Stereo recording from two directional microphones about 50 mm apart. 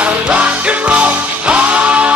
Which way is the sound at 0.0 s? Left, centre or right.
Right.